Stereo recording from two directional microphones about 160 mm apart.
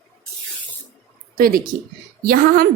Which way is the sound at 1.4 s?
65° right (ahead or behind).